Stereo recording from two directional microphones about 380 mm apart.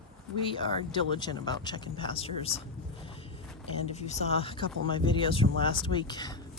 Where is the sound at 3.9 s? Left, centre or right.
Centre.